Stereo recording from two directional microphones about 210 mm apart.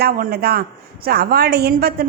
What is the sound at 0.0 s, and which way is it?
A woman's voice, 45° right (ahead or behind).